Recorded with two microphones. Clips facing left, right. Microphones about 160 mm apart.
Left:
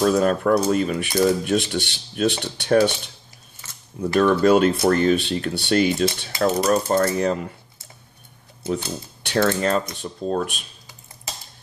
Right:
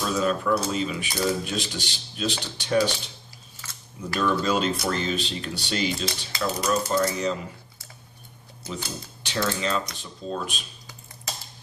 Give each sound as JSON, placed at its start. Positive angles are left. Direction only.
{"t": 0.0, "sound": "speech", "side_deg": 55}
{"t": 4.0, "sound": "speech", "side_deg": 60}
{"t": 8.6, "sound": "speech", "side_deg": 55}